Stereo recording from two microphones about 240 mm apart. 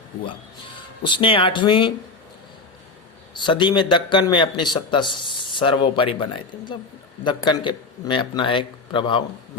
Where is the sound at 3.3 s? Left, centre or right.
Centre.